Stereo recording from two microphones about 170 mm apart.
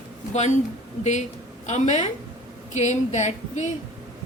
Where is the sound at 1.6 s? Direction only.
45° left (ahead or behind).